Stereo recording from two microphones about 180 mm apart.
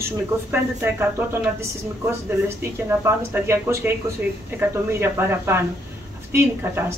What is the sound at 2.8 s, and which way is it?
Speech, 15° right (ahead or behind).